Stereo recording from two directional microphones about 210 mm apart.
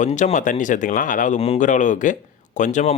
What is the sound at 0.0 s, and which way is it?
Speech, 35° left (ahead or behind).